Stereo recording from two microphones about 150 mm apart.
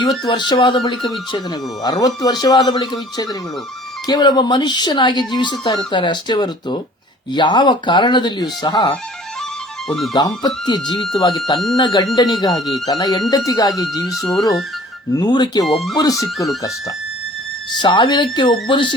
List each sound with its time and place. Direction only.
0.3 s speech: 30° left (ahead or behind)
9.9 s speech: centre (ahead or behind)
10.2 s speech: 30° left (ahead or behind)
15.1 s speech: 30° left (ahead or behind)
15.6 s speech: centre (ahead or behind)
16.0 s speech: 25° left (ahead or behind)
17.7 s speech: 30° left (ahead or behind)